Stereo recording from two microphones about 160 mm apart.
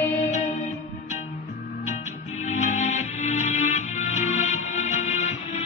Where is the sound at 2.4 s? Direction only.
45° left (ahead or behind).